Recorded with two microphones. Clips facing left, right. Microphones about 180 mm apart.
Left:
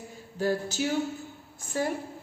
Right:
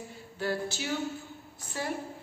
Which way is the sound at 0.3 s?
40° left (ahead or behind).